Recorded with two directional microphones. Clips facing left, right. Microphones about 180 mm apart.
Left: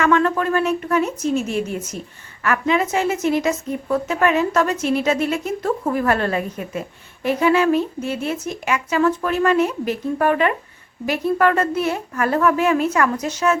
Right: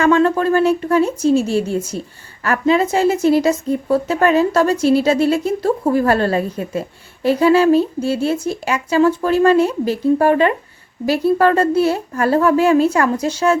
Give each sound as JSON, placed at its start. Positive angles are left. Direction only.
{"t": 0.0, "sound": "a woman's voice", "side_deg": -30}